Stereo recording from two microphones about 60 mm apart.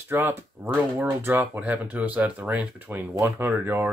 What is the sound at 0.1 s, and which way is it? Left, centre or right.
Speech, right.